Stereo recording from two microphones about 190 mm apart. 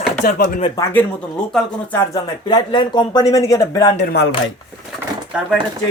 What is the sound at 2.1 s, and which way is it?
Speech, 20° left (ahead or behind).